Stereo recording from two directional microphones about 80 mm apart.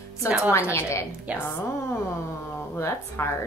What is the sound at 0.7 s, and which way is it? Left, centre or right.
Speech, left.